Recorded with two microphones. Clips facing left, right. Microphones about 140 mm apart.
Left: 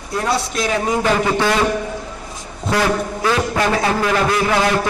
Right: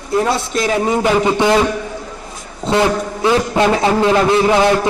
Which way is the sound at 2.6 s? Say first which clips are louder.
Right 3 dB; 25° right (ahead or behind).